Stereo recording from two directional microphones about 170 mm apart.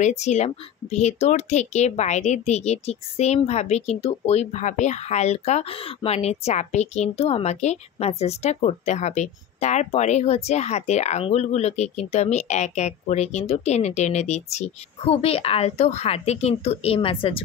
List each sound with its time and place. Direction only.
0.0 s speech: 40° left (ahead or behind)